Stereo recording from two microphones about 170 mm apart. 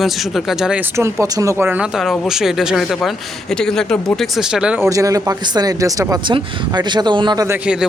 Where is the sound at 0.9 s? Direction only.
15° right (ahead or behind).